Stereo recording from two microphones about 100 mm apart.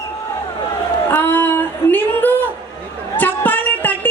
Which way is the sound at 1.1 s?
20° left (ahead or behind).